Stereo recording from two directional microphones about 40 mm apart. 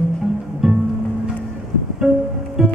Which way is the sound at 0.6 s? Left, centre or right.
Centre.